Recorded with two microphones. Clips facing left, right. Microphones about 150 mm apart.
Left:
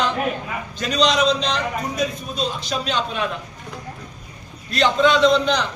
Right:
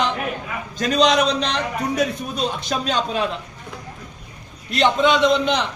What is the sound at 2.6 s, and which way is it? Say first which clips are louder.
Speech: right 1 dB; 45° right (ahead or behind).